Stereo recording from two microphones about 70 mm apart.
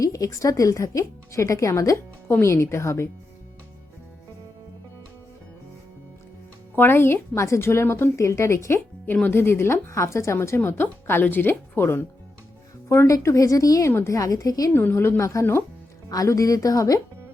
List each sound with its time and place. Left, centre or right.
0.0 s speech: left
2.2 s a woman's voice: left
6.7 s a woman's voice: left
13.1 s speech: left
13.9 s a woman's voice: left
14.2 s speech: left
14.7 s a woman's voice: left
16.0 s speech: left